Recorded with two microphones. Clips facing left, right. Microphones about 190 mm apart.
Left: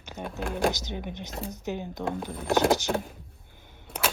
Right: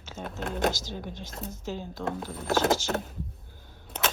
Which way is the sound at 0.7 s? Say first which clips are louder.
Left 1 dB; 20° left (ahead or behind).